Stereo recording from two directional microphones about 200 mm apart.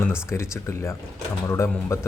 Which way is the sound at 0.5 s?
15° left (ahead or behind).